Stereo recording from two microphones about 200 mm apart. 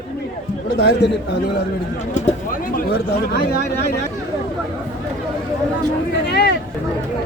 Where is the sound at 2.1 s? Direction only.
40° left (ahead or behind).